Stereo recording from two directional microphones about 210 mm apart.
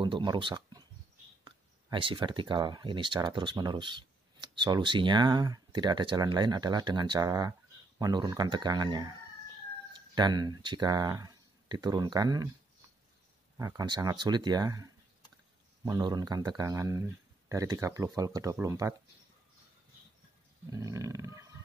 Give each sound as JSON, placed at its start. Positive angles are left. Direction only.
{"t": 0.0, "sound": "speech", "side_deg": -20}
{"t": 9.9, "sound": "a sound", "side_deg": -20}
{"t": 10.6, "sound": "speech", "side_deg": -20}
{"t": 13.6, "sound": "speech", "side_deg": -15}
{"t": 20.7, "sound": "speech", "side_deg": -15}